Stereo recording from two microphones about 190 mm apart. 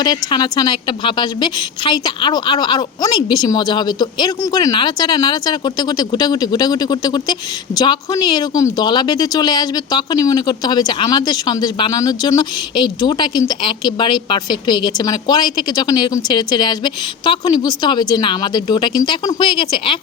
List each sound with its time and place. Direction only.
0.0 s a woman's voice: 20° left (ahead or behind)